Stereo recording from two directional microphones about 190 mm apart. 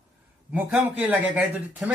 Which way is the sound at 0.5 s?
10° right (ahead or behind).